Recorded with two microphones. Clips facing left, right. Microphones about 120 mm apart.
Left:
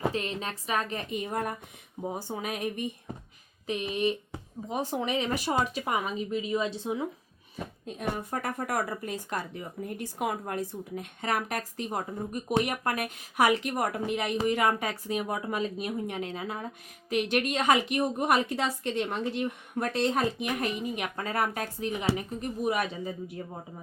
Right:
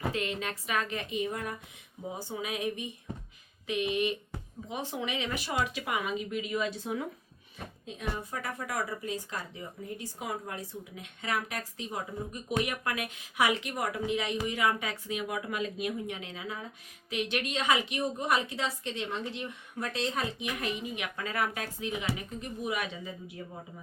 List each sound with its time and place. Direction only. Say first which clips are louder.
0.0 s a woman's voice: left 2 dB; 35° left (ahead or behind); by 2.9 s 50° left (ahead or behind)
3.7 s speech: left 1 dB; 35° left (ahead or behind)
7.9 s a woman's voice: left 4 dB; 50° left (ahead or behind)